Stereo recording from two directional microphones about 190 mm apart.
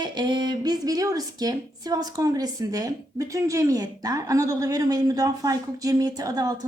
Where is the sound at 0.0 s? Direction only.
25° right (ahead or behind).